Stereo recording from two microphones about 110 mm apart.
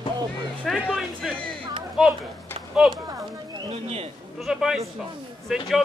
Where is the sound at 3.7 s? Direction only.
65° right (ahead or behind).